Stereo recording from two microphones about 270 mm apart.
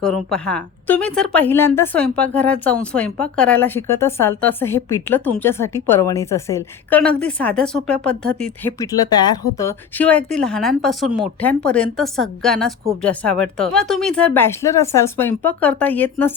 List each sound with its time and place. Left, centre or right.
0.0 s a woman's voice: centre